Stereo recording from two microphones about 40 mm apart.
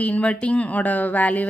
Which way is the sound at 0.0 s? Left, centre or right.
Left.